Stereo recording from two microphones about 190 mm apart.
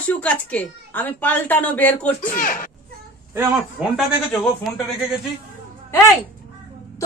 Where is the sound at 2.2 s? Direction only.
45° left (ahead or behind).